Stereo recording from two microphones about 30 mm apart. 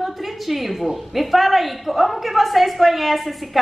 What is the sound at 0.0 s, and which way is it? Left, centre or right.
A woman's voice, centre.